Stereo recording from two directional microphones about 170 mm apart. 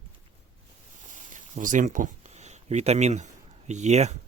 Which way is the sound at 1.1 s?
50° right (ahead or behind).